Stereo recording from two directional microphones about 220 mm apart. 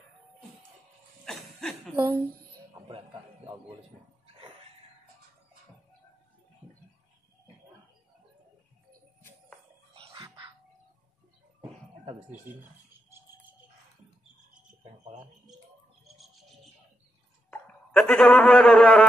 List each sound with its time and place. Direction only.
1.2 s a sound: centre (ahead or behind)
2.0 s a woman's voice: 10° right (ahead or behind)
9.9 s music: 25° right (ahead or behind)
17.5 s speech: 5° left (ahead or behind)